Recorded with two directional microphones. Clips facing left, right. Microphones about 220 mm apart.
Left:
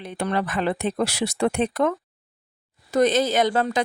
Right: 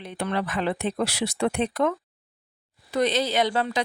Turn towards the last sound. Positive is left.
turn(degrees=45)  # may be behind; listen again after turning